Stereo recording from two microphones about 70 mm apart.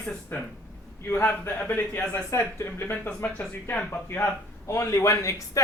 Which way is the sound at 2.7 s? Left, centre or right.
Left.